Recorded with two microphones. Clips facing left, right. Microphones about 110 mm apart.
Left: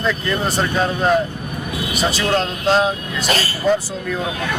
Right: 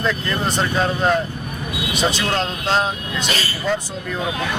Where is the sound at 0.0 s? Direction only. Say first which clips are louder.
Left 1 dB; centre (ahead or behind).